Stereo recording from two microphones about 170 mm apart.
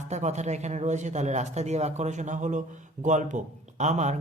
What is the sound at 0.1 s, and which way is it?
Speech, 45° right (ahead or behind).